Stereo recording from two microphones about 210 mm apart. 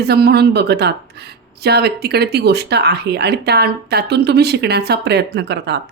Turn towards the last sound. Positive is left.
turn(degrees=-55)  # may be behind; listen again after turning